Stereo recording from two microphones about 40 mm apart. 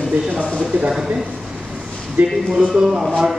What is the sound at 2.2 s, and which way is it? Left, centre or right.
Speech, right.